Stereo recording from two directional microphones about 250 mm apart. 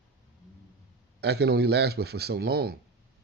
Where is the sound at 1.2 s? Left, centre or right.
Right.